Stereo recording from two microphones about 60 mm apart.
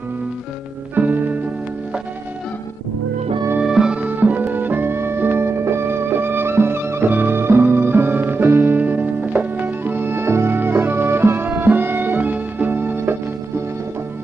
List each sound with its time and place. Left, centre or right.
0.9 s music: right
3.6 s music: centre
4.0 s music: right